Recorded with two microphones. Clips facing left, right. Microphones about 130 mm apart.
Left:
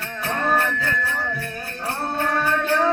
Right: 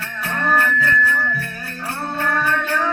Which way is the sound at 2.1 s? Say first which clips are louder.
Right 1 dB; 20° left (ahead or behind).